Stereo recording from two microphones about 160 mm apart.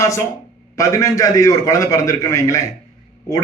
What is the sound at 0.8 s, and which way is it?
Speech, 20° left (ahead or behind).